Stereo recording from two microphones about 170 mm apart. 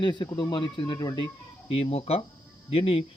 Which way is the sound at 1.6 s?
35° left (ahead or behind).